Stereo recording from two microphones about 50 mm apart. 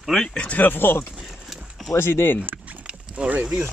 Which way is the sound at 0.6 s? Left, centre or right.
Left.